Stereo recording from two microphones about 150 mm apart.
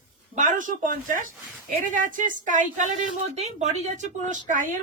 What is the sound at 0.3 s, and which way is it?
Speech, 60° right (ahead or behind).